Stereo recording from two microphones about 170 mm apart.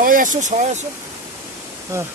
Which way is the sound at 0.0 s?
50° right (ahead or behind).